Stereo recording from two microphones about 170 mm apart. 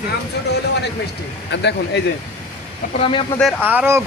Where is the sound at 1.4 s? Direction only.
90° left.